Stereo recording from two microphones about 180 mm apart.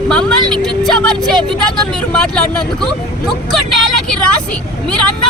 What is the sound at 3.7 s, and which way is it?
Speech, centre (ahead or behind).